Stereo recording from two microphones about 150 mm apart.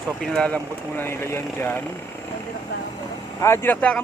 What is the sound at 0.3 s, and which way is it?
Speech, 10° left (ahead or behind).